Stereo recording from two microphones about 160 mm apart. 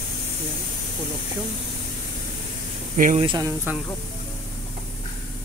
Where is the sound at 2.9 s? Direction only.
55° right (ahead or behind).